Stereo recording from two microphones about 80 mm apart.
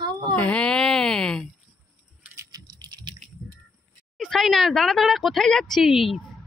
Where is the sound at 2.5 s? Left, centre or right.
Right.